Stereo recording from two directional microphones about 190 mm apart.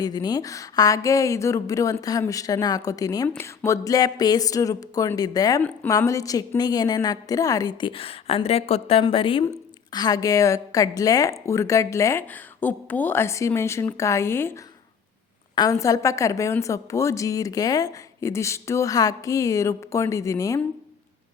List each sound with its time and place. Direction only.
0.0 s a woman's voice: 20° left (ahead or behind)